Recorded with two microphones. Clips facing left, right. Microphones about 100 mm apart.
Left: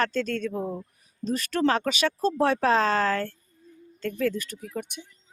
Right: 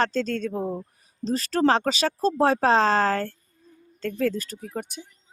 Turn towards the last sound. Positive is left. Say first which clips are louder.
# right 1 dB
turn(degrees=-35)  # may be behind; listen again after turning